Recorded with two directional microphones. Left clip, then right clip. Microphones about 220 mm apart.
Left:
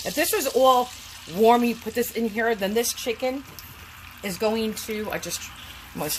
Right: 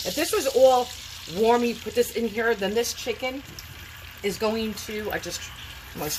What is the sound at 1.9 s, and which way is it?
Speech, 40° left (ahead or behind).